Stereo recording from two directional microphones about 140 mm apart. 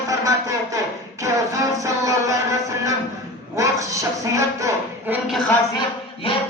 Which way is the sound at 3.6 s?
25° right (ahead or behind).